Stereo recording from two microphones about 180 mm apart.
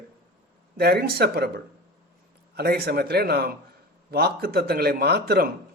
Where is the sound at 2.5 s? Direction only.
60° right (ahead or behind).